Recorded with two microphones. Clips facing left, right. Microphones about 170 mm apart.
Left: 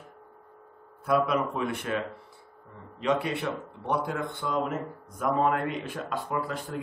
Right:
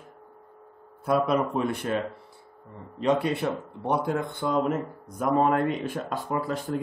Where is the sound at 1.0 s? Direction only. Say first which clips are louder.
Right 2 dB; 35° right (ahead or behind).